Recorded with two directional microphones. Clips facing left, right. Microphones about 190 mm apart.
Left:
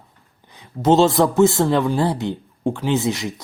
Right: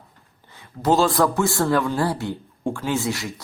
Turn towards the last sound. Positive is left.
turn(degrees=20)  # may be behind; listen again after turning